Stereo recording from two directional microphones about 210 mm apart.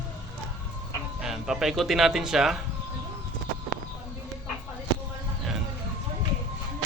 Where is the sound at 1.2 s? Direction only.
Centre (ahead or behind).